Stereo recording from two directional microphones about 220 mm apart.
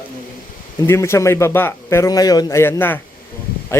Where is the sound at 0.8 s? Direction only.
15° left (ahead or behind).